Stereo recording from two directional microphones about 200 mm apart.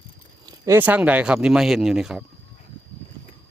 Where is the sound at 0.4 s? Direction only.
15° right (ahead or behind).